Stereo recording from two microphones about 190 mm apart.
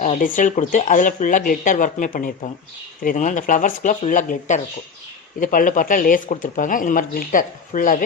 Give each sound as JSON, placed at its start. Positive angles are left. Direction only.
{"t": 0.0, "sound": "speech", "side_deg": 45}